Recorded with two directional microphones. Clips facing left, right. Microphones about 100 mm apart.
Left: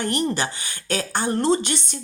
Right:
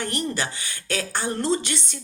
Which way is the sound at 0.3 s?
25° left (ahead or behind).